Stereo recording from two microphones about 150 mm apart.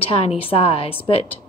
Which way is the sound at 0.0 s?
40° left (ahead or behind).